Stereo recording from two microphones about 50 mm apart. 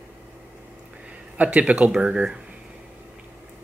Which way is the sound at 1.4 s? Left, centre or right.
Right.